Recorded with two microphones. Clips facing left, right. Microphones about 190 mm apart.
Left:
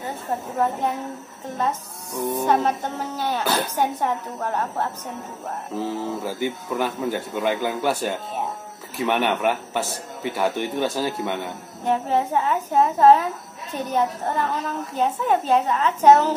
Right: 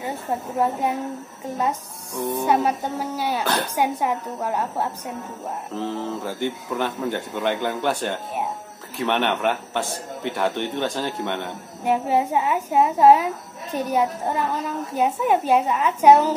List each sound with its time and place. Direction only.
0.0 s a woman's voice: 10° right (ahead or behind)
2.4 s a woman's voice: 10° right (ahead or behind)
5.8 s a man's voice: 5° left (ahead or behind)
11.8 s a woman's voice: 10° right (ahead or behind)